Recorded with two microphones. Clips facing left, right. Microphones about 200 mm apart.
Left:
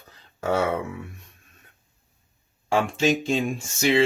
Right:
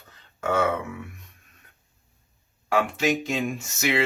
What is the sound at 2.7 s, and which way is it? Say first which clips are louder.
Speech: left 2 dB; 30° left (ahead or behind).